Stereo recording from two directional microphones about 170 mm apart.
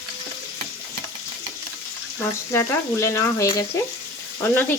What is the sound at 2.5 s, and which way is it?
Frying, 15° left (ahead or behind).